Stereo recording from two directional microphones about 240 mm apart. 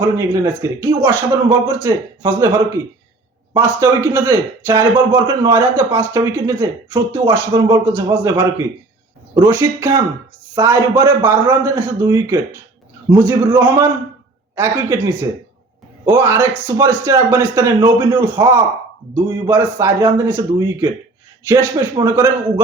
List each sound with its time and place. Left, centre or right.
0.0 s a man's voice: centre
3.5 s a man's voice: centre